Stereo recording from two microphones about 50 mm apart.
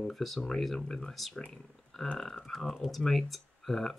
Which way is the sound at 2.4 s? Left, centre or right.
Centre.